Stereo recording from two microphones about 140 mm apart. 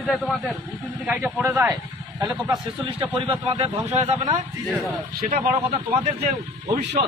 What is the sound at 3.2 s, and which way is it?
Speech, 40° right (ahead or behind).